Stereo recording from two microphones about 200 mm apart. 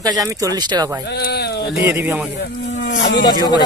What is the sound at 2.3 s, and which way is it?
Speech, 60° left (ahead or behind).